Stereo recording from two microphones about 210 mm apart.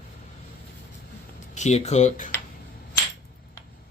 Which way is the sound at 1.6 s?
30° left (ahead or behind).